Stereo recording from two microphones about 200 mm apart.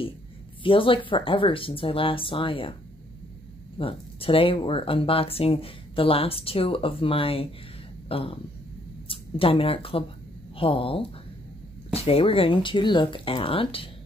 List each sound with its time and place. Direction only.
0.7 s speech: 25° left (ahead or behind)
3.7 s speech: 25° left (ahead or behind)